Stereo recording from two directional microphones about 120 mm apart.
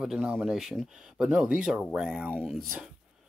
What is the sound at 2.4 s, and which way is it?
Speech, centre (ahead or behind).